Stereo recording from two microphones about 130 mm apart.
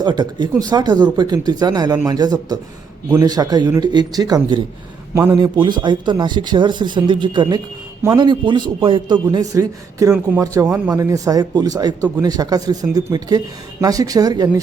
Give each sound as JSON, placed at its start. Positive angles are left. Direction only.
{"t": 0.0, "sound": "speech", "side_deg": -35}
{"t": 5.1, "sound": "speech", "side_deg": -20}
{"t": 5.4, "sound": "speech", "side_deg": -35}
{"t": 9.3, "sound": "speech", "side_deg": -25}